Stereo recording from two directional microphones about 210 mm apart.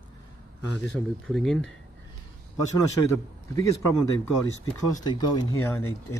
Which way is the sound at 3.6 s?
15° left (ahead or behind).